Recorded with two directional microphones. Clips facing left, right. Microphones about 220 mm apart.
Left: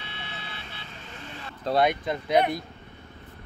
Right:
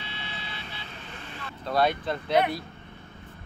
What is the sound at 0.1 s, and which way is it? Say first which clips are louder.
Vehicle: right 1 dB; 55° left (ahead or behind).